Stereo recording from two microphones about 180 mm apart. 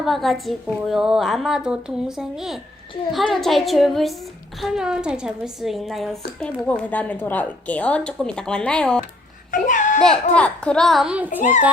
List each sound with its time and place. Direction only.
0.0 s a woman's voice: centre (ahead or behind)
9.5 s music: 45° left (ahead or behind)
10.0 s a woman's voice: 5° left (ahead or behind)